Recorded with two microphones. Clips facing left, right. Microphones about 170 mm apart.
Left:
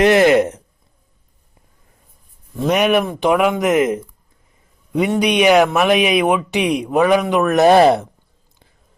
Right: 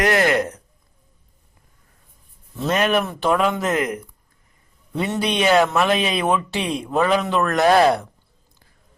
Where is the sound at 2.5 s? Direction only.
15° left (ahead or behind).